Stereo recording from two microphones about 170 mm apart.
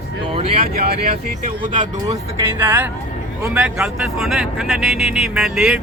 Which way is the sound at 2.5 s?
10° right (ahead or behind).